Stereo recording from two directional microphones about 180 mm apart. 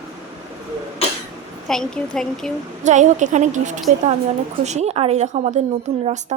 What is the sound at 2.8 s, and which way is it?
A woman's voice, 40° right (ahead or behind).